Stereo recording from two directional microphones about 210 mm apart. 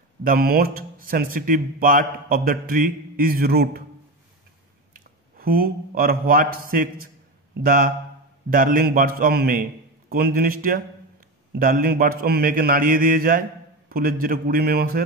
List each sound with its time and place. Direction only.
0.2 s speech: 45° right (ahead or behind)
4.9 s a man's voice: 45° right (ahead or behind)